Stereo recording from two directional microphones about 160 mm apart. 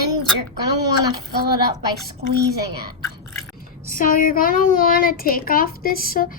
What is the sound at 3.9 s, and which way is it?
A woman's voice, 60° left (ahead or behind).